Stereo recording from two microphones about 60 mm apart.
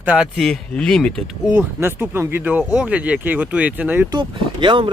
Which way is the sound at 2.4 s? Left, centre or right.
Right.